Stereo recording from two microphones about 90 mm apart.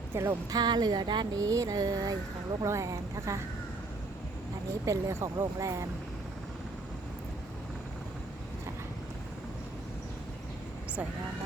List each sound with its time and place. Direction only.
0.1 s speech: 25° right (ahead or behind)
0.5 s speech: 50° right (ahead or behind)
1.4 s speech: 40° right (ahead or behind)
4.9 s speech: 40° right (ahead or behind)